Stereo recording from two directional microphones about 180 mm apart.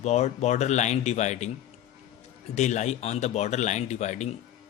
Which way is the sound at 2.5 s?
40° left (ahead or behind).